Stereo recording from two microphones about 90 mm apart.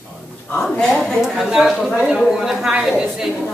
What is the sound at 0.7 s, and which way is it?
A woman's voice, 5° left (ahead or behind).